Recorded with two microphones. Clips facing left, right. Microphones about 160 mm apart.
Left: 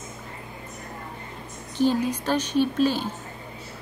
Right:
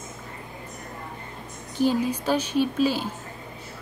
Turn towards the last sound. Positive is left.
turn(degrees=-10)  # may be behind; listen again after turning